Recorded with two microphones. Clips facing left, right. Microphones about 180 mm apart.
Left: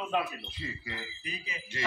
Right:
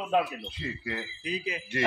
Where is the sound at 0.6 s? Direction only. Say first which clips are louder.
Right 5 dB; 70° right (ahead or behind).